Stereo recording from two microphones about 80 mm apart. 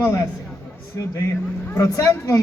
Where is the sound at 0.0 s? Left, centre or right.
Left.